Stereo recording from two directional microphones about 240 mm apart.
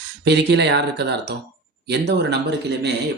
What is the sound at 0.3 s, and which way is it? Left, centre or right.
Speech, right.